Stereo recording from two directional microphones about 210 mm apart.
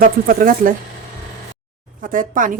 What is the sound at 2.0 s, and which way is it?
Speech, 40° right (ahead or behind).